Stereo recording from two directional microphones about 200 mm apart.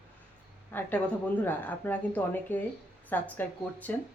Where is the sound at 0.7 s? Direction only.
10° left (ahead or behind).